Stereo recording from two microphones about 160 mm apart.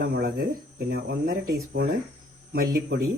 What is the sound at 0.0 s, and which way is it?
Speech, 75° right (ahead or behind).